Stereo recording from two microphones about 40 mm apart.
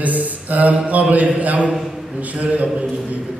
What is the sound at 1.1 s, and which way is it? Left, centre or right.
A man's voice, right.